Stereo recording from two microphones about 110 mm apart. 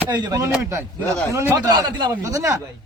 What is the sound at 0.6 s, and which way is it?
Speech, 20° right (ahead or behind).